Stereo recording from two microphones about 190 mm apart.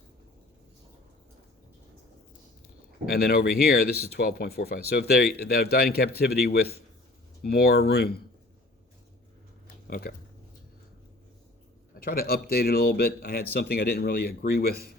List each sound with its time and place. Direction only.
3.1 s speech: 55° left (ahead or behind)
9.8 s speech: 50° left (ahead or behind)
11.9 s speech: 55° left (ahead or behind)